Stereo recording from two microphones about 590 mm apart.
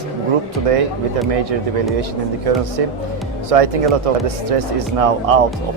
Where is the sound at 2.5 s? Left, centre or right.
Right.